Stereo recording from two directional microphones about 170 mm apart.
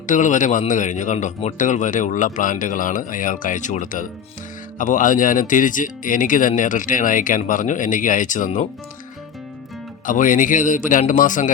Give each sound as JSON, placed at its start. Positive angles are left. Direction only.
{"t": 0.1, "sound": "speech", "side_deg": 50}
{"t": 10.1, "sound": "speech", "side_deg": 50}